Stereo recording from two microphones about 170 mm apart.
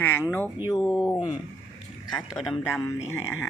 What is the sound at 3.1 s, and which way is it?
Speech, 15° left (ahead or behind).